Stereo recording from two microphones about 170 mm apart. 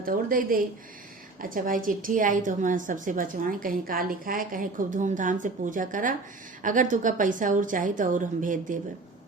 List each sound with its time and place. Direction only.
0.0 s a woman's voice: 55° right (ahead or behind)